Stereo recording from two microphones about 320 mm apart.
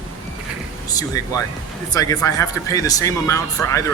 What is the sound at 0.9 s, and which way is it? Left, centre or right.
Speech, centre.